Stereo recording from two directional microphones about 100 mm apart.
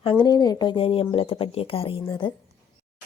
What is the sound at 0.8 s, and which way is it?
Speech, 65° left (ahead or behind).